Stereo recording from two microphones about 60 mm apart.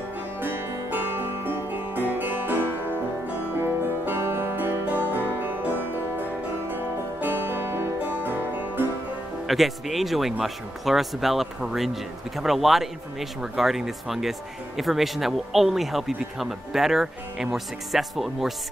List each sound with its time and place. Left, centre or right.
0.4 s music: right
6.7 s music: right
9.5 s speech: centre